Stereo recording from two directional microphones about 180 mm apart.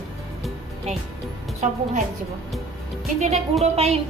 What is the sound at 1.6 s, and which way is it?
Speech, 45° right (ahead or behind).